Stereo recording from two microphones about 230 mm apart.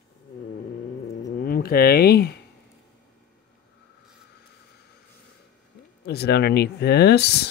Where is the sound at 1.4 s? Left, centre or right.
Left.